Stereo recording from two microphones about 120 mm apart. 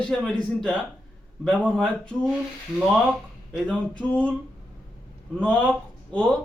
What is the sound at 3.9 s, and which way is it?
Speech, 10° left (ahead or behind).